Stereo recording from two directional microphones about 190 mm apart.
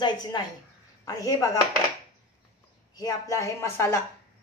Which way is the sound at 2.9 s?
20° left (ahead or behind).